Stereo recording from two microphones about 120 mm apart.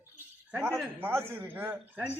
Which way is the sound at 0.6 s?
20° right (ahead or behind).